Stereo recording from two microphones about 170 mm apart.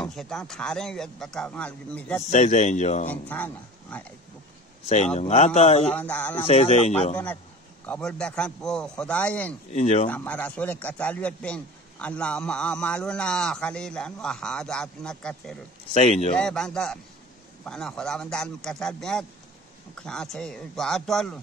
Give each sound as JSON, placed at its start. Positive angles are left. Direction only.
{"t": 0.0, "sound": "a man's voice", "side_deg": 5}
{"t": 2.3, "sound": "speech", "side_deg": 45}
{"t": 3.1, "sound": "a man's voice", "side_deg": 10}
{"t": 4.8, "sound": "speech", "side_deg": 40}
{"t": 5.9, "sound": "a man's voice", "side_deg": 10}
{"t": 6.4, "sound": "speech", "side_deg": 40}
{"t": 7.8, "sound": "a man's voice", "side_deg": 10}
{"t": 9.7, "sound": "speech", "side_deg": 40}
{"t": 10.1, "sound": "a man's voice", "side_deg": 10}
{"t": 15.9, "sound": "speech", "side_deg": 40}
{"t": 16.3, "sound": "a man's voice", "side_deg": 5}